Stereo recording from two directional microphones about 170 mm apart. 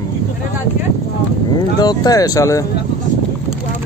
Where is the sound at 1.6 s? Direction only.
25° left (ahead or behind).